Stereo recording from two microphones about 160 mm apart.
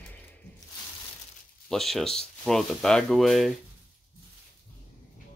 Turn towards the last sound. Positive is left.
turn(degrees=0)  # may be behind; listen again after turning